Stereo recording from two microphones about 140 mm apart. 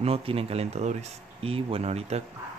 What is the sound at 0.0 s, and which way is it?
Speech, 45° right (ahead or behind).